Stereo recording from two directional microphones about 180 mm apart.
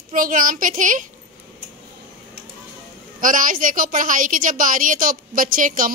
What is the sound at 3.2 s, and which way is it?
A woman's voice, 45° right (ahead or behind).